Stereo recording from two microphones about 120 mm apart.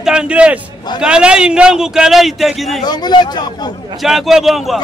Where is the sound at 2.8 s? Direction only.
35° left (ahead or behind).